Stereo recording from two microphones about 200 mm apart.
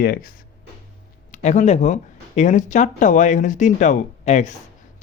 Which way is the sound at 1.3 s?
35° left (ahead or behind).